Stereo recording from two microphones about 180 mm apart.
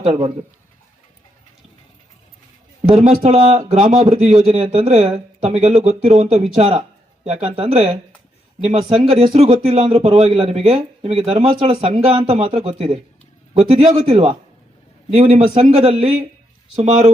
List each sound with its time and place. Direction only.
0.0 s speech: 30° right (ahead or behind)
3.0 s speech: 35° right (ahead or behind)